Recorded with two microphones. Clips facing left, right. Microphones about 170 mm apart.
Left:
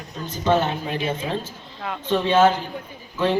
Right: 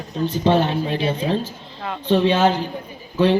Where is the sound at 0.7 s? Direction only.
30° right (ahead or behind).